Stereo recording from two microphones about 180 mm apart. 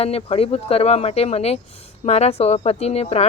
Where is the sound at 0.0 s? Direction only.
35° left (ahead or behind).